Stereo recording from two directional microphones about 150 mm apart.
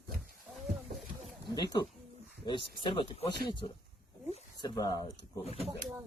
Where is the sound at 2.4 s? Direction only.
30° left (ahead or behind).